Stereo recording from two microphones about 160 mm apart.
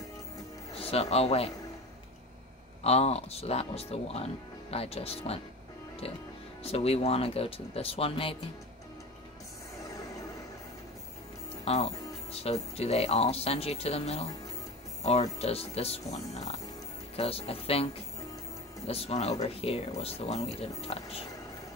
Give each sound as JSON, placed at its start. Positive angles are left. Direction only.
{"t": 0.7, "sound": "a man's voice", "side_deg": 40}
{"t": 2.8, "sound": "speech", "side_deg": 40}
{"t": 6.6, "sound": "speech", "side_deg": 40}
{"t": 11.6, "sound": "music", "side_deg": 40}
{"t": 12.7, "sound": "speech", "side_deg": 40}
{"t": 15.3, "sound": "speech", "side_deg": 40}
{"t": 16.3, "sound": "music", "side_deg": 45}
{"t": 17.1, "sound": "speech", "side_deg": 35}
{"t": 18.9, "sound": "speech", "side_deg": 40}